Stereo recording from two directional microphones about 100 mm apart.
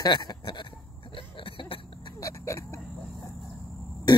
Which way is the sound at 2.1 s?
30° left (ahead or behind).